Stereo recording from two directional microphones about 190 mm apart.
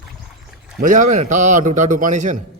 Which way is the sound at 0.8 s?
45° right (ahead or behind).